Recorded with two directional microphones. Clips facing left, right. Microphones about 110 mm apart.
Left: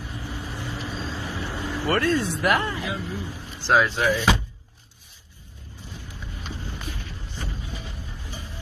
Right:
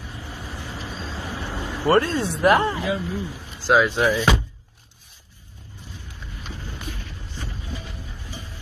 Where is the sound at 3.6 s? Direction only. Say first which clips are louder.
Right 2 dB; 10° right (ahead or behind).